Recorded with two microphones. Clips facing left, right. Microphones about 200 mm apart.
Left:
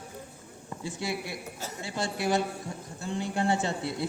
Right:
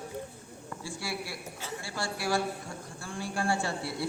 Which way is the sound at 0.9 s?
20° left (ahead or behind).